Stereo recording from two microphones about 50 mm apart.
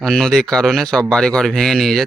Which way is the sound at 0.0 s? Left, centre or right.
Centre.